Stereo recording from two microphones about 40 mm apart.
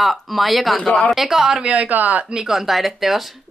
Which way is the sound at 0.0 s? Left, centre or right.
Centre.